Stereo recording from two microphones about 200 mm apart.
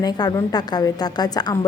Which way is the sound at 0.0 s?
20° left (ahead or behind).